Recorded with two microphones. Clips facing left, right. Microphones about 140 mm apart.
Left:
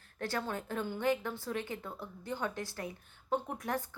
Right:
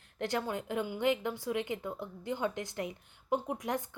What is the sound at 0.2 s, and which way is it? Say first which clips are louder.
A woman's voice: right 3 dB; 20° right (ahead or behind).